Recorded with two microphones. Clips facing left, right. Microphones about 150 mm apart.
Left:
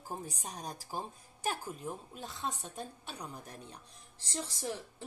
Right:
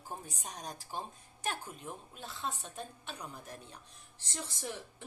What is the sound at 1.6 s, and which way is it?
Speech, 35° left (ahead or behind).